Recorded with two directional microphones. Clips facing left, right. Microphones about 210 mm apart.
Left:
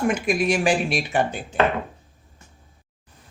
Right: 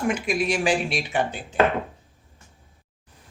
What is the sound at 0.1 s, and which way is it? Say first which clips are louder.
Speech: left 3 dB; 50° left (ahead or behind).